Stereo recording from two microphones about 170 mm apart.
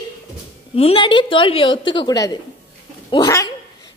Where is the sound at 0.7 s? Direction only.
35° left (ahead or behind).